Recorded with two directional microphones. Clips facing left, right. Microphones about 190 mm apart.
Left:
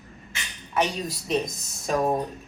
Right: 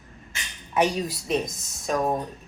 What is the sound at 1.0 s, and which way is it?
Speech, centre (ahead or behind).